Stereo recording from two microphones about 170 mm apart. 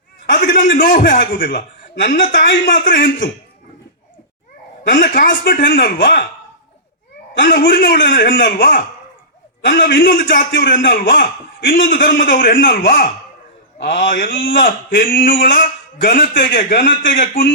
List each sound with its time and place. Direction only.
0.5 s a sound: 55° left (ahead or behind)
1.0 s speech: 55° left (ahead or behind)
2.0 s a woman's voice: 90° left
2.3 s a man's voice: 75° left (ahead or behind); by 3.0 s 55° left (ahead or behind)
4.8 s a man's voice: 60° left (ahead or behind)
7.3 s a man's voice: 65° left (ahead or behind)
9.6 s a man's voice: 75° left (ahead or behind); by 10.2 s 55° left (ahead or behind)
10.5 s a man's voice: 85° left; by 13.1 s 55° left (ahead or behind)
13.7 s a man's voice: 90° left
14.0 s speech: 55° left (ahead or behind)
14.5 s a man's voice: 75° left (ahead or behind); by 17.5 s 55° left (ahead or behind)